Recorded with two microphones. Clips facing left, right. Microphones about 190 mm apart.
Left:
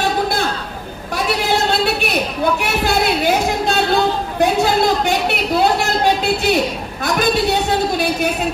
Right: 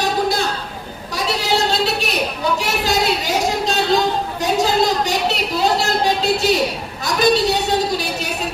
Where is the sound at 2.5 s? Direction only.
55° left (ahead or behind).